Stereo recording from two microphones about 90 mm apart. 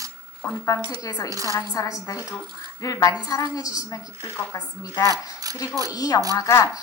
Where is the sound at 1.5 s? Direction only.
35° left (ahead or behind).